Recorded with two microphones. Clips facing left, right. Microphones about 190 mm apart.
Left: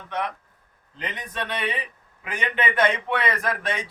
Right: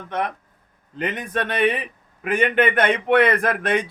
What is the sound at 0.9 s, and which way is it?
A man's voice, 55° right (ahead or behind).